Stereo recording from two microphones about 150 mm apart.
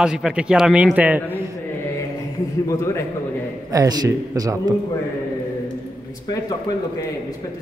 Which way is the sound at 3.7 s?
25° right (ahead or behind).